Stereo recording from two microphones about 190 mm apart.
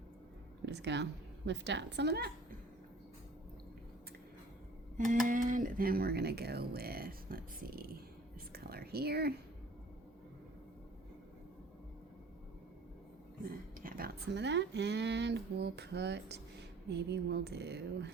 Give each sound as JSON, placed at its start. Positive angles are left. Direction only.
{"t": 0.6, "sound": "speech", "side_deg": -65}
{"t": 4.9, "sound": "speech", "side_deg": -45}
{"t": 8.5, "sound": "a sound", "side_deg": -55}
{"t": 13.4, "sound": "speech", "side_deg": -50}